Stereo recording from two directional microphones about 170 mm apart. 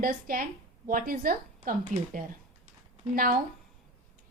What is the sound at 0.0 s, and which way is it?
A woman's voice, 55° right (ahead or behind).